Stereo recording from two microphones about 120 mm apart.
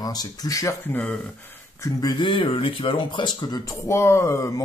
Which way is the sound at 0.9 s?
10° left (ahead or behind).